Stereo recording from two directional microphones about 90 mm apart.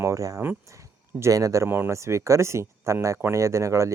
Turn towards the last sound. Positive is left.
turn(degrees=-35)  # may be behind; listen again after turning